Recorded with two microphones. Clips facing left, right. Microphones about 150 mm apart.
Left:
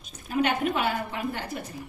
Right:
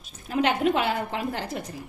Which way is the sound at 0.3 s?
90° right.